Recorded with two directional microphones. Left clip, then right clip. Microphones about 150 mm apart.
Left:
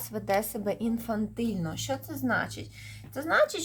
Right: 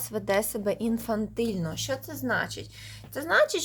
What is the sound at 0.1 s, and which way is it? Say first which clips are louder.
A woman's voice: right 2 dB; 20° right (ahead or behind).